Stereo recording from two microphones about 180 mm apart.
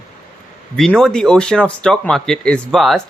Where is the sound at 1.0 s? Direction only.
5° left (ahead or behind).